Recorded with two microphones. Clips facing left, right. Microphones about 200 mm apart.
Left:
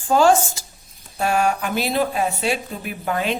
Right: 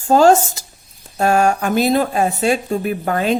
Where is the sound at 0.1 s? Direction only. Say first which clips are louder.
Right 4 dB; 40° right (ahead or behind).